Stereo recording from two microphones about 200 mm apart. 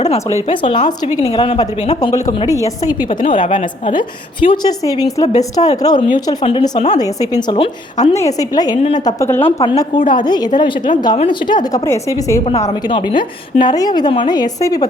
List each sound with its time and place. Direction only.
0.4 s a woman's voice: 25° left (ahead or behind)
6.9 s a woman's voice: 20° left (ahead or behind)
9.6 s a woman's voice: 25° left (ahead or behind)
12.5 s a woman's voice: 30° left (ahead or behind)